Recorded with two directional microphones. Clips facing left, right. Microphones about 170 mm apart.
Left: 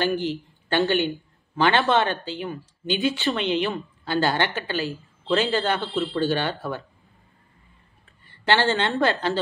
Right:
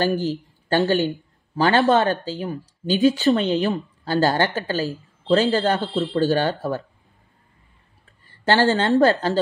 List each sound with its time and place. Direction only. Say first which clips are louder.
0.0 s speech: right 3 dB; 40° right (ahead or behind)
8.3 s speech: right 3 dB; 40° right (ahead or behind)